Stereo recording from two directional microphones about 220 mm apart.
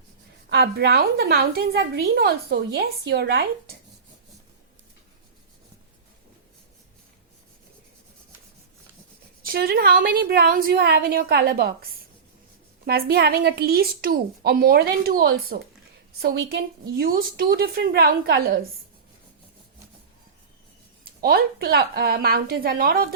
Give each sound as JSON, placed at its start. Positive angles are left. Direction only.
{"t": 0.5, "sound": "a woman's voice", "side_deg": -50}
{"t": 9.4, "sound": "a woman's voice", "side_deg": -45}
{"t": 21.2, "sound": "a woman's voice", "side_deg": -45}